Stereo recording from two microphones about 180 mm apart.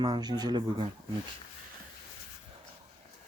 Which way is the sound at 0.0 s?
25° right (ahead or behind).